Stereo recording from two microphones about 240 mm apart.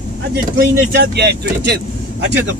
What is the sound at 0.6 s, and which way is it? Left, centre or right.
Speech, right.